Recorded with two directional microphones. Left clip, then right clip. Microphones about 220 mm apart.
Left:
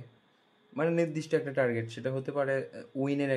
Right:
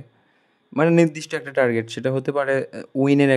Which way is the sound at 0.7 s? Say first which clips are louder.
Right 11 dB; 50° right (ahead or behind).